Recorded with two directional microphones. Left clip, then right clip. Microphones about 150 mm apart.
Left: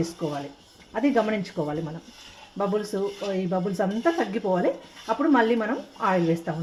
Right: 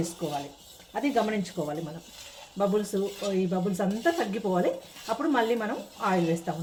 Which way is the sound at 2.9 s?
35° left (ahead or behind).